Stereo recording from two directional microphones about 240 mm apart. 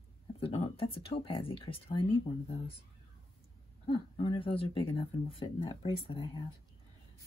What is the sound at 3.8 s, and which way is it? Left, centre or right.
Speech, left.